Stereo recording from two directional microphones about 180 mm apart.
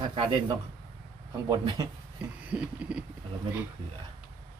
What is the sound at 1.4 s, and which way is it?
Speech, 25° right (ahead or behind).